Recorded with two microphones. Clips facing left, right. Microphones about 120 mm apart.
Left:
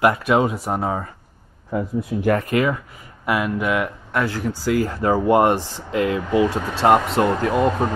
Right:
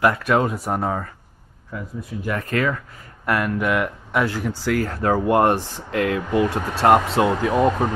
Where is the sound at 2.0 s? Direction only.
70° left (ahead or behind).